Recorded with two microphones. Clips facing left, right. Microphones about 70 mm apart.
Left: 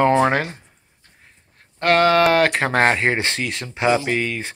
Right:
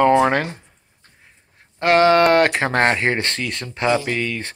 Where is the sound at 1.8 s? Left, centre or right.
Centre.